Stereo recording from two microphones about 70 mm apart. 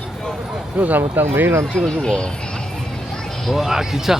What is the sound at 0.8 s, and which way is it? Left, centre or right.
Speech, right.